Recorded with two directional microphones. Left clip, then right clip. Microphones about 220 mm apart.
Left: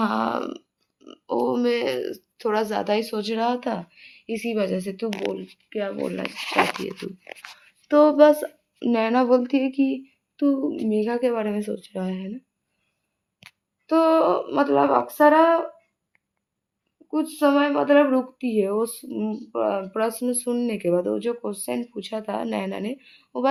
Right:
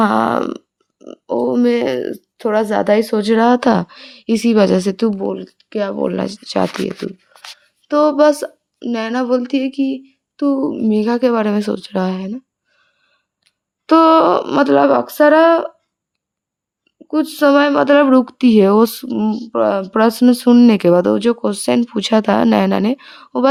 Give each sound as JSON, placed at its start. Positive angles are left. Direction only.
{"t": 0.0, "sound": "a sound", "side_deg": -45}
{"t": 5.2, "sound": "speech", "side_deg": -35}
{"t": 7.9, "sound": "speech", "side_deg": -20}
{"t": 8.9, "sound": "speech", "side_deg": -10}
{"t": 13.8, "sound": "speech", "side_deg": -55}
{"t": 17.1, "sound": "speech", "side_deg": -55}